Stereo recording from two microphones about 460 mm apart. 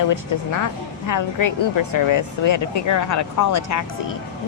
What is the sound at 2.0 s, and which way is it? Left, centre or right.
Speech, left.